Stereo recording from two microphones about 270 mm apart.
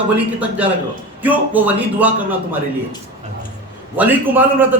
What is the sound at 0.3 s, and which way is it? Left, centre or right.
A man's voice, centre.